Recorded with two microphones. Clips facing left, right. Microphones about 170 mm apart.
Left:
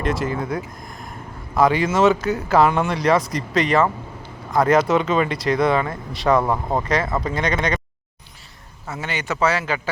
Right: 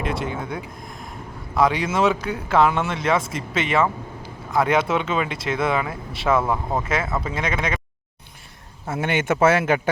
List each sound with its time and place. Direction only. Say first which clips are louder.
0.0 s speech: left 3 dB; centre (ahead or behind)
8.9 s speech: right 5 dB; 55° right (ahead or behind)